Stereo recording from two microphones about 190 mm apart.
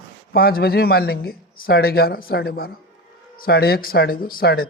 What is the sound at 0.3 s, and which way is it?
Speech, 55° left (ahead or behind).